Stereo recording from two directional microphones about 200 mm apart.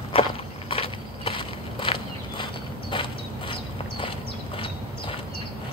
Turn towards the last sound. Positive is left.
turn(degrees=25)  # may be behind; listen again after turning